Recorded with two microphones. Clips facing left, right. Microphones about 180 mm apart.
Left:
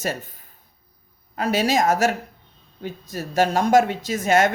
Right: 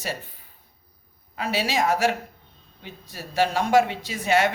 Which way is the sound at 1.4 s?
45° left (ahead or behind).